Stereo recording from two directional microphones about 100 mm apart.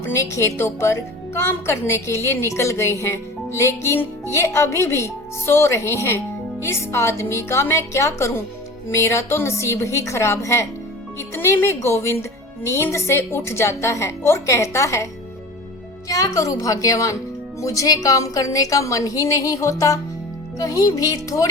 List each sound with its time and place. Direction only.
0.0 s a woman's voice: 25° left (ahead or behind)
16.0 s a woman's voice: 35° left (ahead or behind)